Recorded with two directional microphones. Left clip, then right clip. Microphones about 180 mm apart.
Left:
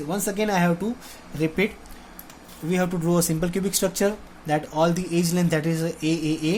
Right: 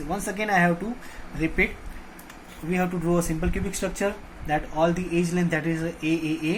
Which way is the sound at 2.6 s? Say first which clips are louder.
Left 2 dB; 55° left (ahead or behind).